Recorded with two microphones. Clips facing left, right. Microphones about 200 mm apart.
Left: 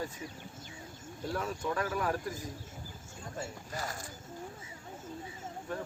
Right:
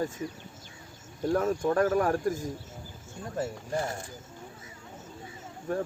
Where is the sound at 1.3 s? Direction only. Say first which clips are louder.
Right 9 dB; 50° right (ahead or behind).